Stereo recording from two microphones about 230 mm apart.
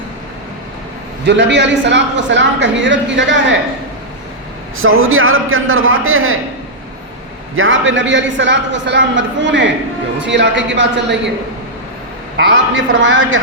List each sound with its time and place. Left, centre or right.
1.2 s a man's voice: right
4.8 s a man's voice: right
7.5 s a man's voice: right
12.5 s a man's voice: right